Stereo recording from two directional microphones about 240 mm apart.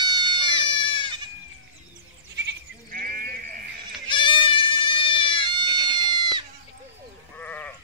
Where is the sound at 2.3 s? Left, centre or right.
Right.